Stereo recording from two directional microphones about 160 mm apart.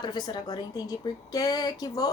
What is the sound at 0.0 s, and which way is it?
A woman's voice, 25° left (ahead or behind).